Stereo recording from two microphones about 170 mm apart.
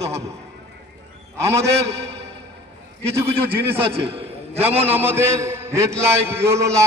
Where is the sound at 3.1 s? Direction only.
15° right (ahead or behind).